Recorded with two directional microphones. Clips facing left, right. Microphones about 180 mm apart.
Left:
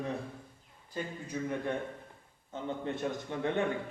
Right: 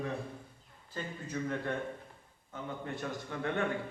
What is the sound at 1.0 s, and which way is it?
A man's voice, 15° left (ahead or behind).